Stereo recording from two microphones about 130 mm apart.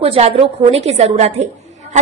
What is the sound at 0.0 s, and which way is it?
A woman's voice, 50° right (ahead or behind).